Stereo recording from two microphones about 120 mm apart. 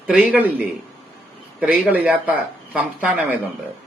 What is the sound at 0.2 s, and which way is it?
Speech, 15° right (ahead or behind).